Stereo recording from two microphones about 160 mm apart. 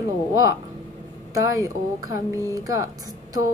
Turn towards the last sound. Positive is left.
turn(degrees=-20)  # may be behind; listen again after turning